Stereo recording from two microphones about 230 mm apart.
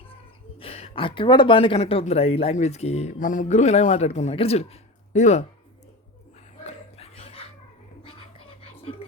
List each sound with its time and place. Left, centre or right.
0.6 s speech: left
6.7 s dog: left
8.0 s whispering: left